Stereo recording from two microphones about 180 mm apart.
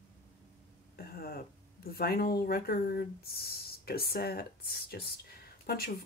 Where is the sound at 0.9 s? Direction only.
60° left (ahead or behind).